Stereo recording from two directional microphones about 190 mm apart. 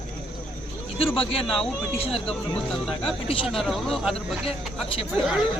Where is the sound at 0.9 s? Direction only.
30° left (ahead or behind).